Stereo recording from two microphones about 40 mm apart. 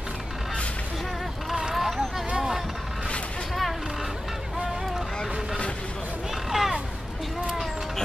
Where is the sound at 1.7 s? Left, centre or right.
Centre.